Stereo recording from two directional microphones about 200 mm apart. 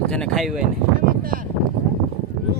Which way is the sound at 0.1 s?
Centre (ahead or behind).